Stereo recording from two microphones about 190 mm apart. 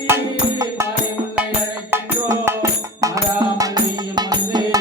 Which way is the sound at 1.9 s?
15° right (ahead or behind).